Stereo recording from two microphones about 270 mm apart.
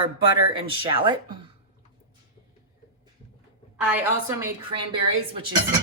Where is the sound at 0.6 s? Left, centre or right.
Centre.